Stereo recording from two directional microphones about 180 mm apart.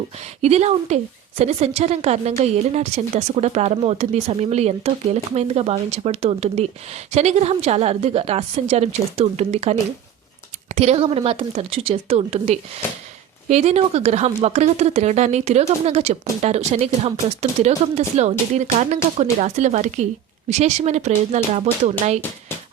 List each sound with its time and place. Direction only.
0.4 s a woman's voice: 35° right (ahead or behind)